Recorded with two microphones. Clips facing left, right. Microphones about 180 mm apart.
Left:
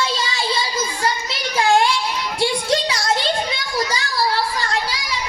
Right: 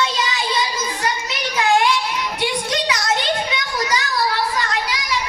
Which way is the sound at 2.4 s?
30° left (ahead or behind).